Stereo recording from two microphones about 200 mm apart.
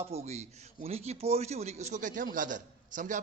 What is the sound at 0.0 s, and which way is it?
A man's voice, 30° right (ahead or behind).